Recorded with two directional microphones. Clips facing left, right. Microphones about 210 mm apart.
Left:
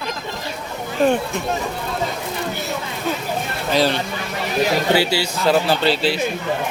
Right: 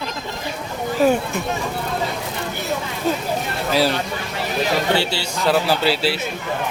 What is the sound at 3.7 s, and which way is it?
Speech, 10° right (ahead or behind).